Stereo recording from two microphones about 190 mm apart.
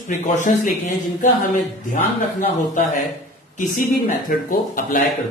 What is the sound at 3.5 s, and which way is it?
Speech, 45° left (ahead or behind).